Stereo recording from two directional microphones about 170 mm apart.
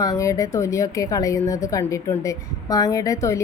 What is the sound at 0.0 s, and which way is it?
A woman's voice, 20° left (ahead or behind).